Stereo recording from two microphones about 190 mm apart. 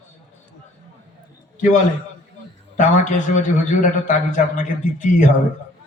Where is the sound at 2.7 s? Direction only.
40° left (ahead or behind).